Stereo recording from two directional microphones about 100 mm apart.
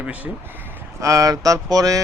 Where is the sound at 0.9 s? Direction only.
30° right (ahead or behind).